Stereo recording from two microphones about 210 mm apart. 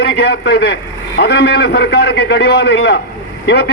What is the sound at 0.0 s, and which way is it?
A man's voice, 55° left (ahead or behind).